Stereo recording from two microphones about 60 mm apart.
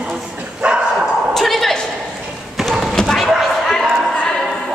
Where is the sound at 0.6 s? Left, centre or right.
Centre.